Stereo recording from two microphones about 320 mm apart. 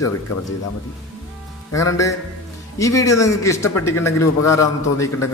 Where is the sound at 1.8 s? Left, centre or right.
Centre.